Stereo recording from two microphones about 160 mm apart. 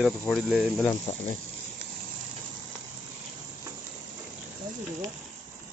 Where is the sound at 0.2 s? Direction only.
5° left (ahead or behind).